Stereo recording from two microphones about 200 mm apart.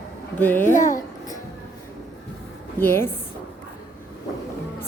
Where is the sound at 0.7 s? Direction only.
40° left (ahead or behind).